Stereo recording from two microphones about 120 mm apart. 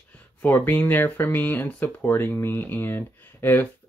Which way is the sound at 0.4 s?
15° left (ahead or behind).